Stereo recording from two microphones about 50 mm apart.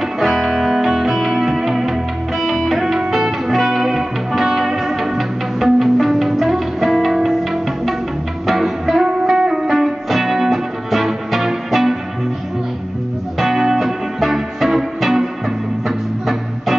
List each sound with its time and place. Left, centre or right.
0.2 s music: centre
13.4 s music: centre